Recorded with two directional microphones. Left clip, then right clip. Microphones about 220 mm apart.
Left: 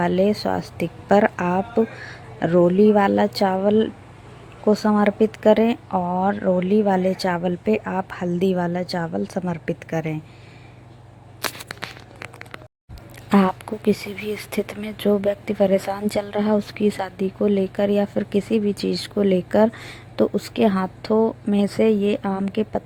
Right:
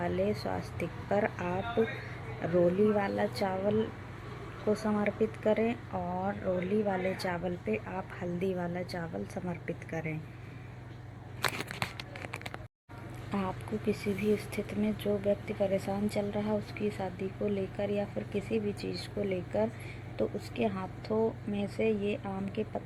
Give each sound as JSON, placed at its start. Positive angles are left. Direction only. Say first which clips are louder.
{"t": 0.0, "sound": "a woman's voice", "louder": "left 12 dB", "side_deg": 50}
{"t": 4.9, "sound": "a woman's voice", "louder": "left 12 dB", "side_deg": 45}
{"t": 13.3, "sound": "speech", "louder": "left 16 dB", "side_deg": 55}